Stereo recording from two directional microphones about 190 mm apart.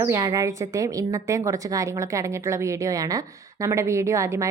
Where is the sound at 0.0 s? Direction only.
15° right (ahead or behind).